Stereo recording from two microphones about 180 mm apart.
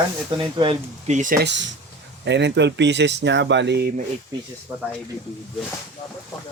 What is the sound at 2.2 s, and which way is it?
Speech, 75° right (ahead or behind).